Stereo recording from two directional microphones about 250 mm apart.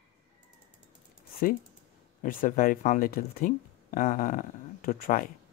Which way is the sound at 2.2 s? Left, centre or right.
Left.